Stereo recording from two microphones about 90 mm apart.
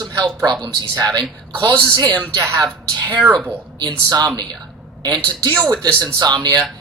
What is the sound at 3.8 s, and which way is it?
Speech, 50° right (ahead or behind).